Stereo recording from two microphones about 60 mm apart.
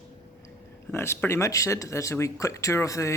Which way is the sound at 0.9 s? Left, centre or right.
Left.